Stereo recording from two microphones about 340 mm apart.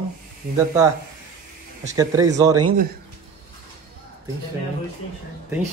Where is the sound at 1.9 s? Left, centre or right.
Centre.